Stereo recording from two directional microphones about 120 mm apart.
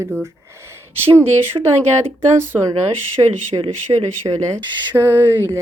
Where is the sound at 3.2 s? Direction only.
25° right (ahead or behind).